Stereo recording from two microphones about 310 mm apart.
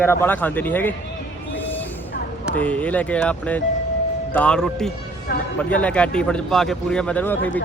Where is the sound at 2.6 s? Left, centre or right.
Centre.